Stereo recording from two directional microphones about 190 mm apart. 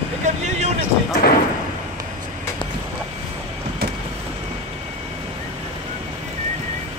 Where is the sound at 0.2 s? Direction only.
35° right (ahead or behind).